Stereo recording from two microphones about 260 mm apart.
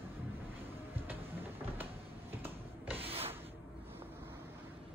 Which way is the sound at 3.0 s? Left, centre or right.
Right.